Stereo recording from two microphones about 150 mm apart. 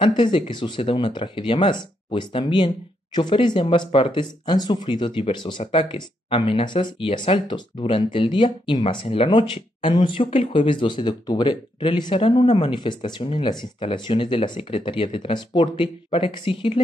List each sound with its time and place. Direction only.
0.0 s speech: 35° left (ahead or behind)